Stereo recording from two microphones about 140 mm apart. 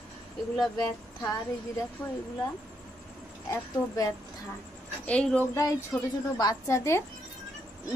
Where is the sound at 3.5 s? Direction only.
25° left (ahead or behind).